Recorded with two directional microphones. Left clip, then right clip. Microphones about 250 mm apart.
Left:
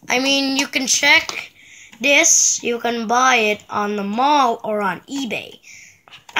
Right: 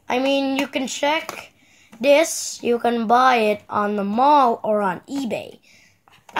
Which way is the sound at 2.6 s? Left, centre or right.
Right.